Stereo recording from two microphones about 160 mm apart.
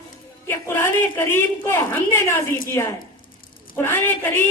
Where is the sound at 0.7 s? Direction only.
15° left (ahead or behind).